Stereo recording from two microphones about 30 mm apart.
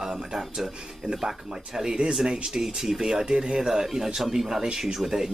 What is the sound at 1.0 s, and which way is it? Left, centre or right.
Speech, right.